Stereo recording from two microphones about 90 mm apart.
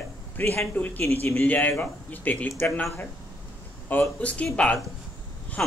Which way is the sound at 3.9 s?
20° left (ahead or behind).